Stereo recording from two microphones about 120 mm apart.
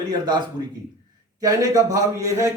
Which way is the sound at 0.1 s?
35° right (ahead or behind).